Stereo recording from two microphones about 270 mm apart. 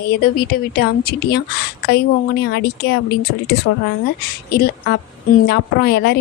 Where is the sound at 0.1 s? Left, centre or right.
Left.